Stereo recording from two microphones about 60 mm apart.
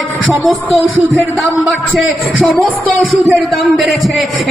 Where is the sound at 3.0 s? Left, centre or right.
Centre.